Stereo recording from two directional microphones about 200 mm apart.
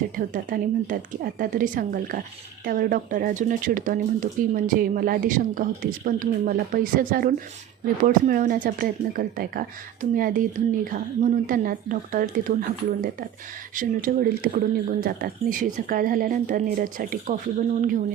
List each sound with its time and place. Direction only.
0.2 s speech: 45° right (ahead or behind)
13.7 s speech: 45° right (ahead or behind)